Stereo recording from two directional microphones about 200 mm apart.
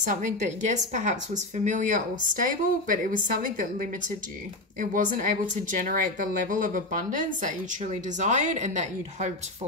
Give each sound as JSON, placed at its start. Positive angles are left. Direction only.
{"t": 0.1, "sound": "a woman's voice", "side_deg": -40}